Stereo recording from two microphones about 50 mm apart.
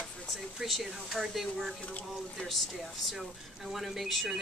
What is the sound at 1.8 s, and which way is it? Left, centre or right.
Speech, left.